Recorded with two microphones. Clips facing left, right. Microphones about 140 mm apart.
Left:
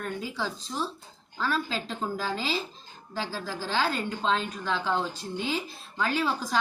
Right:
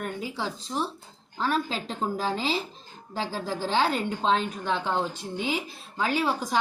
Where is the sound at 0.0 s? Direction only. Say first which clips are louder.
Right 1 dB; 20° right (ahead or behind).